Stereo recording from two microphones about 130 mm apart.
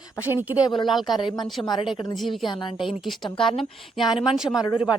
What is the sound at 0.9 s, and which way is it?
A woman's voice, centre (ahead or behind).